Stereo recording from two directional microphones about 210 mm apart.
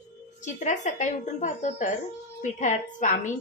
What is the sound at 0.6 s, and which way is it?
A woman's voice, 35° left (ahead or behind).